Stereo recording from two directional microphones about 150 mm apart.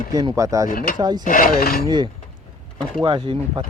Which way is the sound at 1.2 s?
65° left (ahead or behind).